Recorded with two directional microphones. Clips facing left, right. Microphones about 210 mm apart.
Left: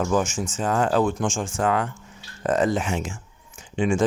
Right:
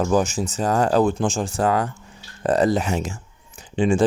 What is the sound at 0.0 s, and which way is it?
Speech, 35° right (ahead or behind).